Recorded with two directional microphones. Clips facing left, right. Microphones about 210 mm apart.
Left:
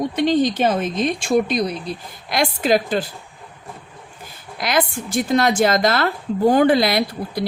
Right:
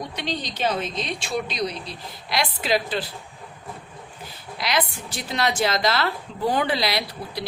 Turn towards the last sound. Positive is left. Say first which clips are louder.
# left 7 dB
turn(degrees=50)  # may be behind; listen again after turning